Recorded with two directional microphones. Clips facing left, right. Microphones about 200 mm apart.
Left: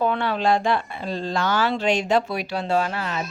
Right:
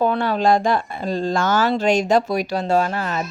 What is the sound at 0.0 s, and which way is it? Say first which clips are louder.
Speech: right 4 dB; 40° right (ahead or behind).